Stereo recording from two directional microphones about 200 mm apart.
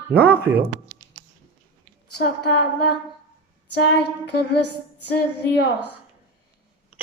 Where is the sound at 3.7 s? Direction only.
55° left (ahead or behind).